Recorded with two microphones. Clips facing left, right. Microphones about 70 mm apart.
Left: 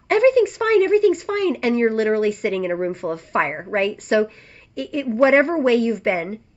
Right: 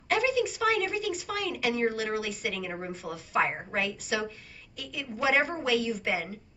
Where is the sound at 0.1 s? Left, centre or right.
Left.